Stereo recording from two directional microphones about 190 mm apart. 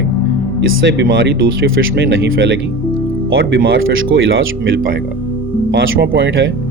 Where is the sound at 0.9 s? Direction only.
65° right (ahead or behind).